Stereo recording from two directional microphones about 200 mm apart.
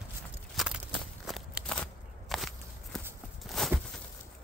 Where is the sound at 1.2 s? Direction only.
Centre (ahead or behind).